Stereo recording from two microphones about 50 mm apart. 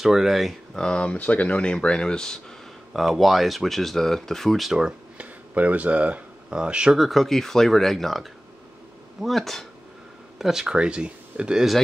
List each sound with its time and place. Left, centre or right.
0.0 s speech: centre
0.7 s speech: left
1.7 s speech: centre
2.9 s speech: centre
5.1 s speech: right
6.5 s speech: centre
7.0 s speech: centre
10.4 s speech: centre
10.7 s speech: right